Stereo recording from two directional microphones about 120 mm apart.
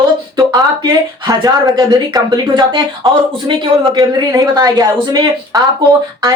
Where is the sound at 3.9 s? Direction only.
35° right (ahead or behind).